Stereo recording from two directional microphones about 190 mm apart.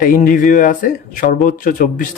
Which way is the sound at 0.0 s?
45° left (ahead or behind).